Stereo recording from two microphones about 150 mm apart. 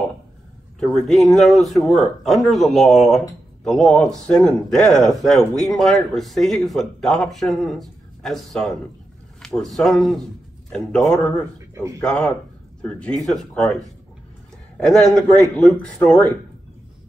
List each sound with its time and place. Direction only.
0.7 s speech: centre (ahead or behind)
11.7 s speech: 20° right (ahead or behind)
12.0 s speech: 5° left (ahead or behind)
14.8 s speech: 5° left (ahead or behind)